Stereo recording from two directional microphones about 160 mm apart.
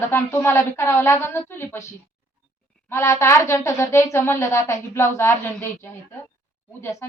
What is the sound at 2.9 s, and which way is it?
A woman's voice, 20° left (ahead or behind).